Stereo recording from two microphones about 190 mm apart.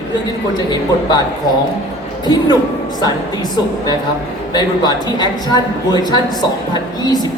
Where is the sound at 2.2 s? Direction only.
20° left (ahead or behind).